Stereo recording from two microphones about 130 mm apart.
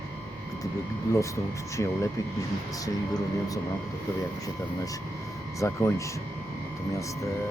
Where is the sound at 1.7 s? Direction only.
20° left (ahead or behind).